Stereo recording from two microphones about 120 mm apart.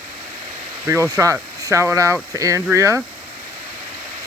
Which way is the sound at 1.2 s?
25° right (ahead or behind).